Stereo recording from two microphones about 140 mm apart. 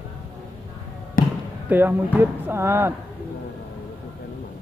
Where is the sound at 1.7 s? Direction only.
15° right (ahead or behind).